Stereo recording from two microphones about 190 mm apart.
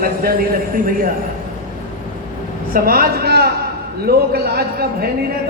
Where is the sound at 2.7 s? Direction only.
50° right (ahead or behind).